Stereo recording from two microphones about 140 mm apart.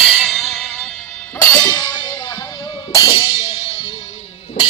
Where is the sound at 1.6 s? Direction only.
25° left (ahead or behind).